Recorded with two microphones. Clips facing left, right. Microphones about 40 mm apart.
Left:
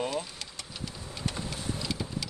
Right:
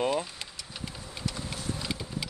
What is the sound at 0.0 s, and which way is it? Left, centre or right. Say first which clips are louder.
Vehicle: right 4 dB; right.